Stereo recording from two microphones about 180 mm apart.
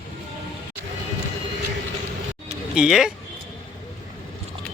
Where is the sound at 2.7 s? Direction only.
5° right (ahead or behind).